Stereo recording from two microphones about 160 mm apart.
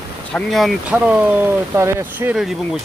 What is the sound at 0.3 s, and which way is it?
Speech, centre (ahead or behind).